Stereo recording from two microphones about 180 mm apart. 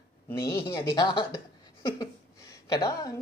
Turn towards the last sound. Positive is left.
turn(degrees=20)  # may be behind; listen again after turning